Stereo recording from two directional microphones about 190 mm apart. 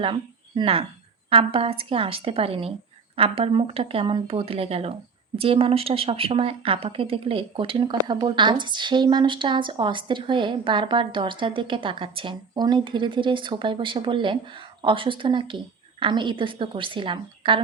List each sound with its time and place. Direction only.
0.0 s speech: 30° right (ahead or behind)